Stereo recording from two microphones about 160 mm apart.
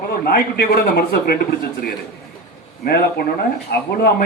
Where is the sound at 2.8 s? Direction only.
70° left (ahead or behind).